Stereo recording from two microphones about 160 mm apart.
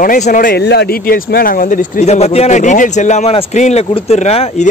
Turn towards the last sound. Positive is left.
turn(degrees=40)  # may be behind; listen again after turning